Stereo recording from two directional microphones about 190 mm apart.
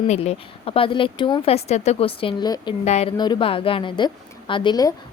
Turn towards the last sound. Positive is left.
turn(degrees=20)  # may be behind; listen again after turning